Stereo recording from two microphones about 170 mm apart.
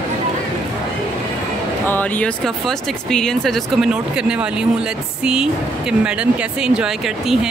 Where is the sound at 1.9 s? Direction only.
10° left (ahead or behind).